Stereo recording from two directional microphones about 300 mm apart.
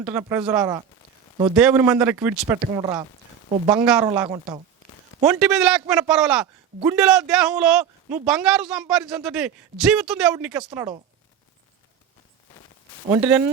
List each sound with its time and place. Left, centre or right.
0.0 s a man's voice: centre
2.7 s speech: centre
5.2 s a man's voice: centre